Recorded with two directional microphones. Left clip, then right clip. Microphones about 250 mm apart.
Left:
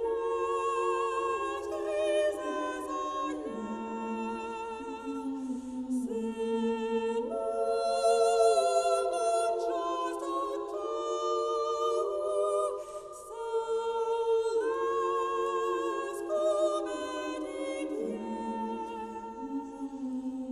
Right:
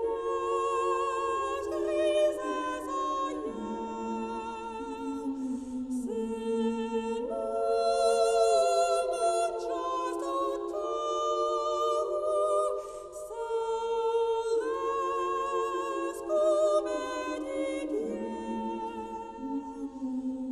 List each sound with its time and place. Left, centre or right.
0.3 s music: right
5.9 s a capella: right
11.2 s music: right
13.5 s a capella: right